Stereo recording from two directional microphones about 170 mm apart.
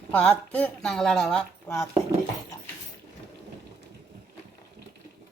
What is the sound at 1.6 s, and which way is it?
Speech, 15° left (ahead or behind).